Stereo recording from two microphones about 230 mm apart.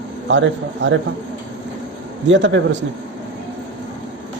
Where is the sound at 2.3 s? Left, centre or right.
Right.